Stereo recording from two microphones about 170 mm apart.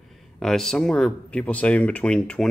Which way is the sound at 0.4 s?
Centre (ahead or behind).